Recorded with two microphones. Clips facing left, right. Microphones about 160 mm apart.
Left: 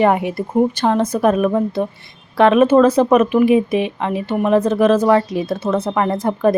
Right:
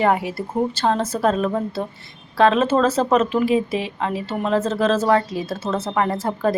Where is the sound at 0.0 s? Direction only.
20° left (ahead or behind).